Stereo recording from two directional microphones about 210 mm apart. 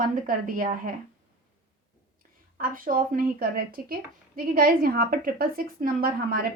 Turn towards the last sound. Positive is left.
turn(degrees=-45)  # may be behind; listen again after turning